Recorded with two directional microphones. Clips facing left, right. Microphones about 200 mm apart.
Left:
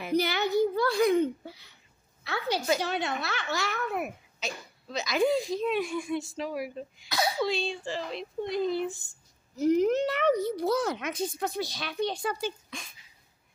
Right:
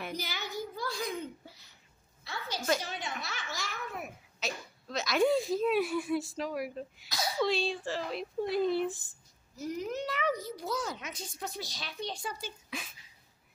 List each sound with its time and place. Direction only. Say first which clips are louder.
0.1 s a sound: left 13 dB; 65° left (ahead or behind)
2.2 s a child's voice: left 5 dB; 65° left (ahead or behind)
4.4 s speech: even; centre (ahead or behind)
7.1 s a child's voice: left 7 dB; 65° left (ahead or behind)
7.4 s speech: even; centre (ahead or behind)
9.6 s a child's voice: left 12 dB; 70° left (ahead or behind)
12.6 s speech: right 2 dB; 5° right (ahead or behind)